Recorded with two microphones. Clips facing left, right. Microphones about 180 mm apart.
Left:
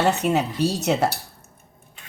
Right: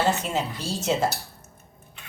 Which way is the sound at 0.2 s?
65° left (ahead or behind).